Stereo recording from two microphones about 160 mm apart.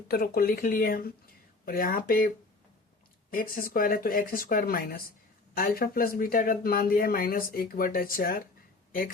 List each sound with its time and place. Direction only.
0.1 s speech: 70° left (ahead or behind)